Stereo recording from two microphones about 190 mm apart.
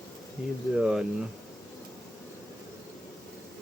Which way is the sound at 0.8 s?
5° right (ahead or behind).